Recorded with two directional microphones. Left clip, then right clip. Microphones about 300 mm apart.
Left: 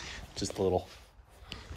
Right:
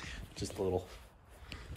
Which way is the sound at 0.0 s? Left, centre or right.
Centre.